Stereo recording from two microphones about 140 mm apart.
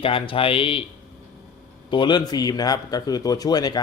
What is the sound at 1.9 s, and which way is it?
A man's voice, 35° left (ahead or behind).